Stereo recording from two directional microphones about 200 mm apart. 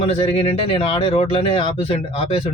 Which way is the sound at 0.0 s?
30° left (ahead or behind).